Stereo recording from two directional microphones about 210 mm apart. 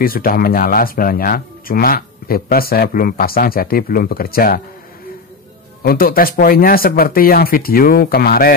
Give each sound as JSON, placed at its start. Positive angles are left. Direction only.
{"t": 0.0, "sound": "speech", "side_deg": 45}
{"t": 5.8, "sound": "speech", "side_deg": 45}